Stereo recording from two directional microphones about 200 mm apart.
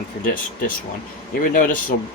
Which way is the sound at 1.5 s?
40° left (ahead or behind).